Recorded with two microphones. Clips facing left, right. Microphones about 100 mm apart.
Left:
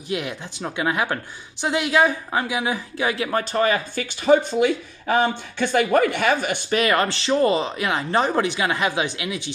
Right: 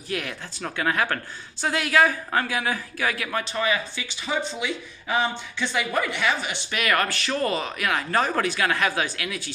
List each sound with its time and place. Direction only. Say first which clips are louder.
0.1 s speech: left 4 dB; 20° left (ahead or behind)
3.3 s speech: left 6 dB; 40° left (ahead or behind)
6.7 s speech: left 4 dB; 30° left (ahead or behind)